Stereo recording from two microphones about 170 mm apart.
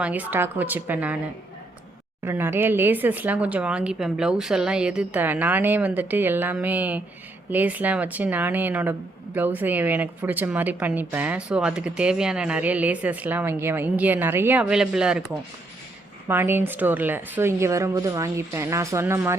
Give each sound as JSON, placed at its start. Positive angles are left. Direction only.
{"t": 0.0, "sound": "speech", "side_deg": -10}
{"t": 2.2, "sound": "speech", "side_deg": -15}
{"t": 16.3, "sound": "speech", "side_deg": -10}